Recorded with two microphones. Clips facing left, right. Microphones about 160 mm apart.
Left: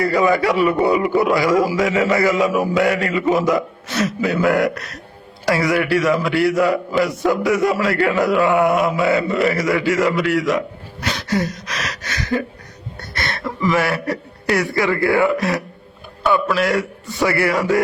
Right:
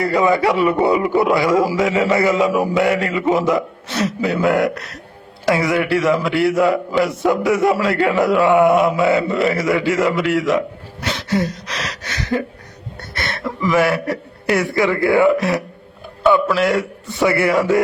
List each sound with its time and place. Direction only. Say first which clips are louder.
0.0 s a man's voice: right 1 dB; 25° right (ahead or behind)
13.1 s a sound: even; 20° right (ahead or behind)
13.7 s a man's voice: right 3 dB; 20° right (ahead or behind)